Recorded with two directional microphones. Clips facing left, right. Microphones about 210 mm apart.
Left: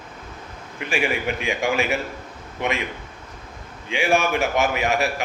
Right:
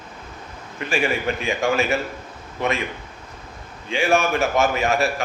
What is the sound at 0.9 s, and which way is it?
A man's voice, 15° left (ahead or behind).